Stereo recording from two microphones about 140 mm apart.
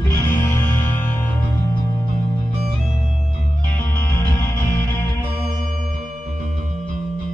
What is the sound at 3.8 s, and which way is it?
Music, 15° left (ahead or behind).